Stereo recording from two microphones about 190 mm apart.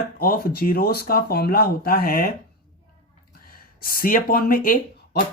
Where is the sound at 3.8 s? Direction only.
50° left (ahead or behind).